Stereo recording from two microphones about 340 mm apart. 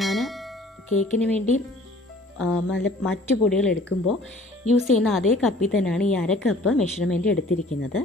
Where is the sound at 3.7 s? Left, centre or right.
Left.